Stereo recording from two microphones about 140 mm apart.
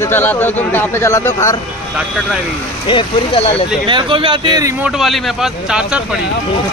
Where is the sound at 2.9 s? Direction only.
40° left (ahead or behind).